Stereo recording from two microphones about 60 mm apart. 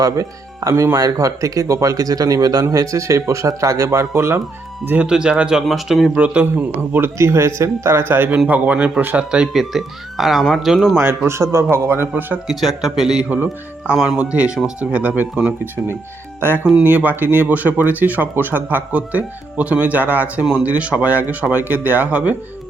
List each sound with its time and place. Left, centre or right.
0.0 s speech: right
0.7 s speech: right
0.9 s speech: right
5.0 s speech: centre
5.6 s speech: centre
6.1 s speech: right
7.2 s speech: right
8.4 s speech: right
9.1 s speech: centre
9.5 s speech: centre
10.9 s a man's voice: right
12.5 s a man's voice: centre; by 22.4 s right